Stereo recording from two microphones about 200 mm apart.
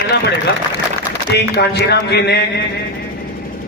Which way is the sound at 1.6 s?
55° left (ahead or behind).